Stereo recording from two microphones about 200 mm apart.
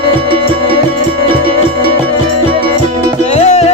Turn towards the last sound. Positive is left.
turn(degrees=35)  # may be behind; listen again after turning